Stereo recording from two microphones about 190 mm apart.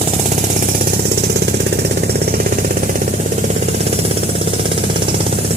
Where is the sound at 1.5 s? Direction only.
60° right (ahead or behind).